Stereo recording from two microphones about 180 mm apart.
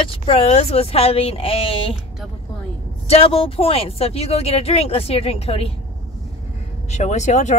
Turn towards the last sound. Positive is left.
turn(degrees=40)  # may be behind; listen again after turning